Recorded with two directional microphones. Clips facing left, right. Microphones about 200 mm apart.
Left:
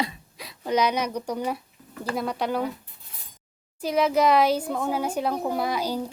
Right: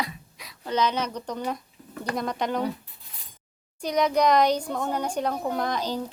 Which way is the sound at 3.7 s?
5° left (ahead or behind).